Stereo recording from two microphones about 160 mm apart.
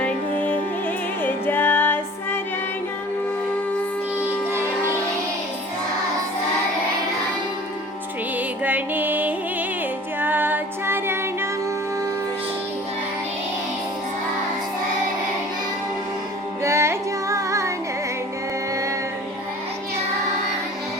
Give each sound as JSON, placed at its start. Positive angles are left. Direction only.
{"t": 0.0, "sound": "music", "side_deg": 10}
{"t": 8.4, "sound": "music", "side_deg": -10}
{"t": 16.6, "sound": "carnatic music", "side_deg": -15}